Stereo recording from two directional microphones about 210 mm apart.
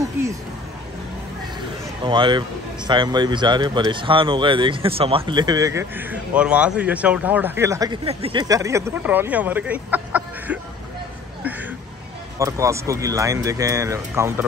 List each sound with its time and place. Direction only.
2.0 s speech: 25° right (ahead or behind); by 10.6 s 5° right (ahead or behind)
12.4 s speech: 15° right (ahead or behind)